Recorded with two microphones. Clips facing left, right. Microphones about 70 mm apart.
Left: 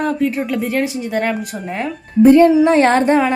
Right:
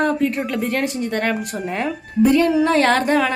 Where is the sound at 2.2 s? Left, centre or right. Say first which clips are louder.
Left 7 dB; left.